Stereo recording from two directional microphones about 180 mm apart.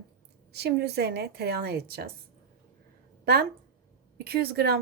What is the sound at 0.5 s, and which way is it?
Speech, 65° right (ahead or behind).